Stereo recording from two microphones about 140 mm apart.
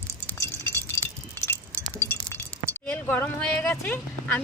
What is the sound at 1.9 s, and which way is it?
Chink, 15° left (ahead or behind).